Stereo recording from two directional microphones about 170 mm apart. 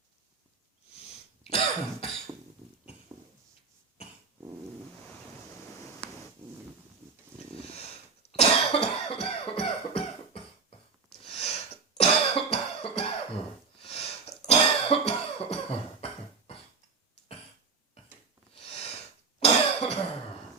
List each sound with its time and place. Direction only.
1.5 s cough: 35° left (ahead or behind)
8.4 s cough: 35° left (ahead or behind)
19.4 s cough: 40° left (ahead or behind)